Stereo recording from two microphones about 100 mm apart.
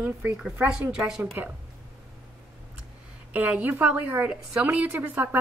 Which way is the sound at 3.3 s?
15° right (ahead or behind).